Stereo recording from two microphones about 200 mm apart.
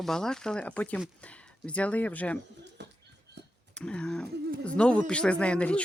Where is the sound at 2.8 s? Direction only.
60° right (ahead or behind).